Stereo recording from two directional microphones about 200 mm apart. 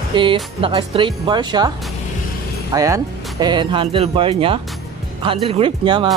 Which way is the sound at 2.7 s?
15° right (ahead or behind).